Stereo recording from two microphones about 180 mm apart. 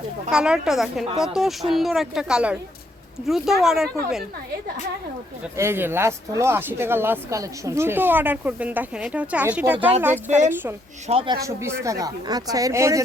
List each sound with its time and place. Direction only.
0.3 s speech: 5° right (ahead or behind)
5.5 s speech: 15° right (ahead or behind)
10.2 s a woman's voice: 40° right (ahead or behind)
10.5 s speech: 10° right (ahead or behind)
11.1 s a woman's voice: 30° right (ahead or behind)
11.3 s speech: 15° right (ahead or behind)